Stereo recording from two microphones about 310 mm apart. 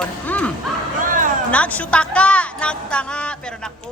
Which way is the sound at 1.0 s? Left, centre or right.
Right.